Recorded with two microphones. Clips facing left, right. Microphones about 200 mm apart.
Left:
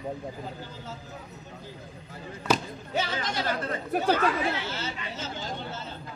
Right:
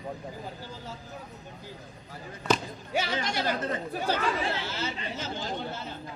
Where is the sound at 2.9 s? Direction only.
10° right (ahead or behind).